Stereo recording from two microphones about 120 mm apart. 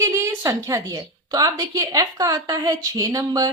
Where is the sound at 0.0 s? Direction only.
25° right (ahead or behind).